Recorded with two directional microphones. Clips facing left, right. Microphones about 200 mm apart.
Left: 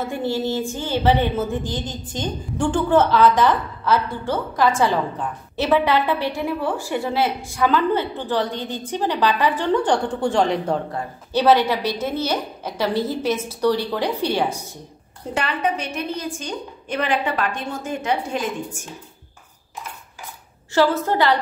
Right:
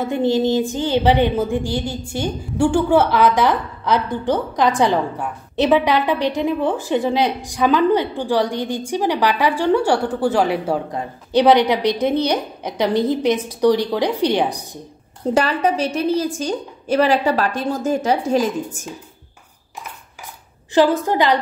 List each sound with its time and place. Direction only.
0.0 s a woman's voice: 20° right (ahead or behind)
15.3 s a woman's voice: 40° right (ahead or behind)
20.7 s a woman's voice: 15° right (ahead or behind)